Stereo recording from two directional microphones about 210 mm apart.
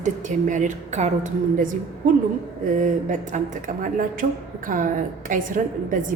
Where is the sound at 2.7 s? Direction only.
40° right (ahead or behind).